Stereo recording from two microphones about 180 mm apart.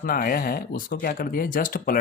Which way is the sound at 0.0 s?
55° left (ahead or behind).